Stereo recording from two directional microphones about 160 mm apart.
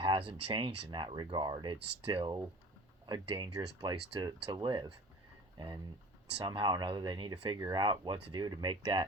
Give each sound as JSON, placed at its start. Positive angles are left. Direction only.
{"t": 0.0, "sound": "speech", "side_deg": -30}